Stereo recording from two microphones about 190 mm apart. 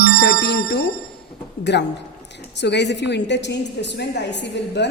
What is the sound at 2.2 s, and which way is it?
A woman's voice, 65° left (ahead or behind).